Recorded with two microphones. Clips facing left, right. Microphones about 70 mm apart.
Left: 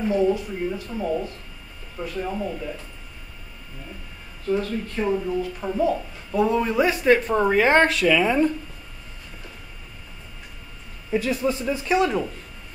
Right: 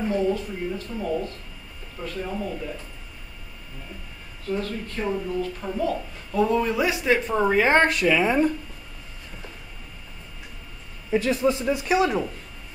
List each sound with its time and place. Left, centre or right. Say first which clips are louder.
0.1 s speech: left 5 dB; centre
4.5 s speech: left 4 dB; centre
5.0 s speech: left 3 dB; centre
5.3 s speech: left 2 dB; centre
8.1 s speech: left 1 dB; right
11.4 s speech: right 2 dB; right